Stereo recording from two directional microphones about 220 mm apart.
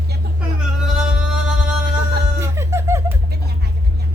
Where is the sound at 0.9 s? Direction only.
5° right (ahead or behind).